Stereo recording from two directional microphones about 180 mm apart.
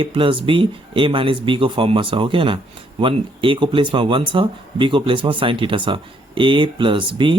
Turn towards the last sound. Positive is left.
turn(degrees=-25)  # may be behind; listen again after turning